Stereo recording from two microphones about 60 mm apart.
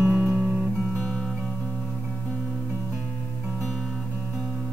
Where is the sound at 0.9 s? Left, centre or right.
Centre.